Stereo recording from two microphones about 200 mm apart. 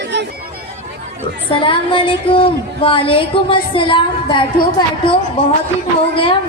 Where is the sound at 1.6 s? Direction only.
25° left (ahead or behind).